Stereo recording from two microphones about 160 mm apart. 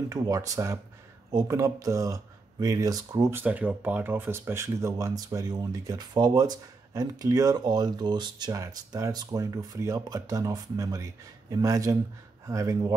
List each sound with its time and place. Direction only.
0.1 s speech: 20° right (ahead or behind)